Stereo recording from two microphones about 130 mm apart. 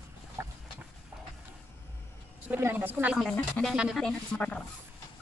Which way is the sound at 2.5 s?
15° right (ahead or behind).